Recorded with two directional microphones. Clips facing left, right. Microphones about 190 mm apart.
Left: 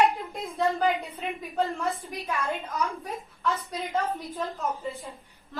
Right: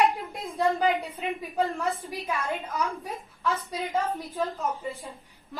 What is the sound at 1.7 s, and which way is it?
Speech, centre (ahead or behind).